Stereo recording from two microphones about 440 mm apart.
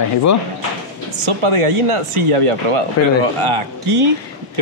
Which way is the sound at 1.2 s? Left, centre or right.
Right.